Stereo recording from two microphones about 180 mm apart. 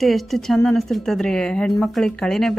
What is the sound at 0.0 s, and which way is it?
Speech, centre (ahead or behind).